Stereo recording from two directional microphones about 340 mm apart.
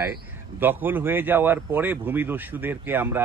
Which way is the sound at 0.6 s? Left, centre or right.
Centre.